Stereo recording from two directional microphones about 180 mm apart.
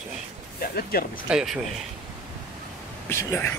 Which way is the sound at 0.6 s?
55° left (ahead or behind).